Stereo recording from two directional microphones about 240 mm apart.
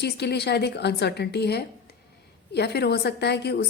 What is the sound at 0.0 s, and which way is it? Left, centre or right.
A woman's voice, left.